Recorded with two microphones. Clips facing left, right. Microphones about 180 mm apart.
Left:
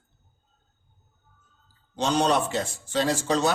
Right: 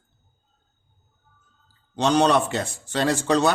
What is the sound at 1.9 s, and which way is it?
A man's voice, 65° right (ahead or behind).